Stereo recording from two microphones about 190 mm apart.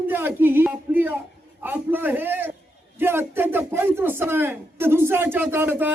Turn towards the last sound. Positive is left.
turn(degrees=-10)  # may be behind; listen again after turning